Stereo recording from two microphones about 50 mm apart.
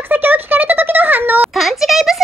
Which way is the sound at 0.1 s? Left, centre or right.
Right.